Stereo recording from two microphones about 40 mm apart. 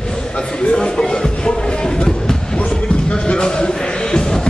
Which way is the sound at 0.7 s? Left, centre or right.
Left.